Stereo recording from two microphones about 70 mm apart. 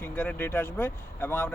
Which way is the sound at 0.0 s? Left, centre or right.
Left.